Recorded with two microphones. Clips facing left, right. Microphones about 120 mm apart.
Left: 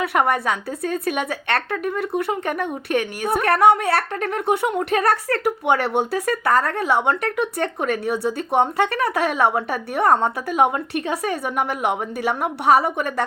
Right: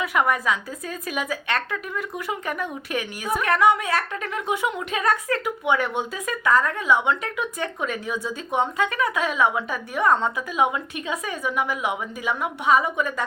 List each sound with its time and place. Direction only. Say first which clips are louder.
0.0 s a woman's voice: left 3 dB; 60° left (ahead or behind)
1.7 s a woman's voice: left 7 dB; 55° left (ahead or behind)